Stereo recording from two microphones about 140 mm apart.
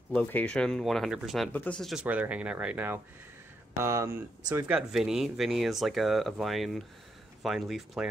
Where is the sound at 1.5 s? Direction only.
10° left (ahead or behind).